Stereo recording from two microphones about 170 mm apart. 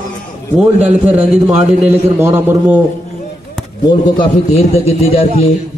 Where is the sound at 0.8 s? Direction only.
45° right (ahead or behind).